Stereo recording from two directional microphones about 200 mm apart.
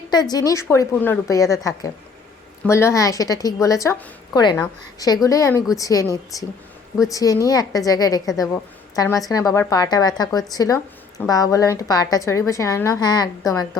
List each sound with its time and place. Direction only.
0.1 s a woman's voice: 20° left (ahead or behind)
2.6 s a woman's voice: 15° left (ahead or behind)